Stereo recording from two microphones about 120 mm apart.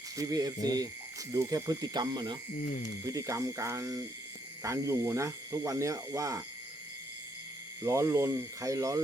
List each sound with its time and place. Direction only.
0.2 s speech: 30° right (ahead or behind)
3.1 s speech: 25° right (ahead or behind)
7.8 s speech: 25° right (ahead or behind)